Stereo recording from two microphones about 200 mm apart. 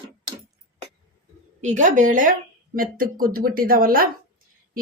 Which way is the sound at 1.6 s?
40° right (ahead or behind).